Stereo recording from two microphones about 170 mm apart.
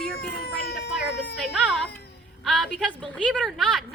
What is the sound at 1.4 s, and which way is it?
A woman's voice, centre (ahead or behind).